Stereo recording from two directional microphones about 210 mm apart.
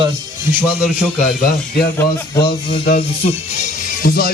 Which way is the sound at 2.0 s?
20° left (ahead or behind).